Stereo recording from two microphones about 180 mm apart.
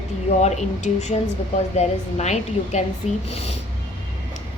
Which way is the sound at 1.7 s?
40° left (ahead or behind).